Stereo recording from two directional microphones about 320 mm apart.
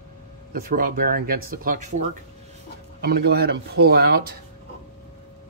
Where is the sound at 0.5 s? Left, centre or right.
Right.